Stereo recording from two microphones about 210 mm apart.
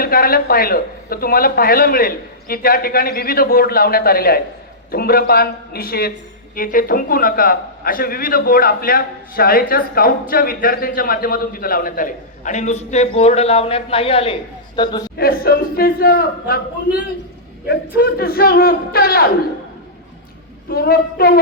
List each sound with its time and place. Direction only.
0.0 s a man's voice: 45° left (ahead or behind); by 15.0 s 20° left (ahead or behind)
15.2 s a man's voice: 45° left (ahead or behind)
17.7 s a man's voice: 45° left (ahead or behind)
20.7 s a man's voice: 45° left (ahead or behind)